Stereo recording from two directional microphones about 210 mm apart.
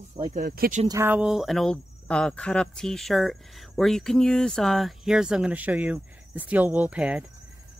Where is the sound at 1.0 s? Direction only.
5° right (ahead or behind).